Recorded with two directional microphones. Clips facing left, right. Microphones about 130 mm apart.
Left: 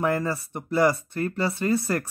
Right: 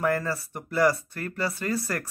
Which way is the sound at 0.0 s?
20° left (ahead or behind).